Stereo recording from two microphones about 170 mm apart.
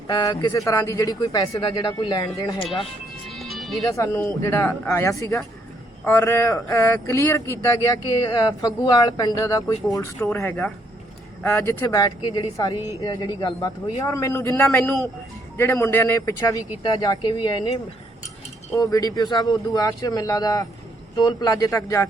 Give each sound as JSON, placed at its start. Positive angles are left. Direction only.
{"t": 0.1, "sound": "speech", "side_deg": 25}
{"t": 3.2, "sound": "music", "side_deg": 0}
{"t": 3.8, "sound": "speech", "side_deg": 20}
{"t": 18.7, "sound": "speech", "side_deg": 20}